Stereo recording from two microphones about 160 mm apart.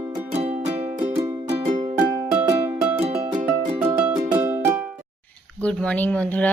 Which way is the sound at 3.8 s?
15° right (ahead or behind).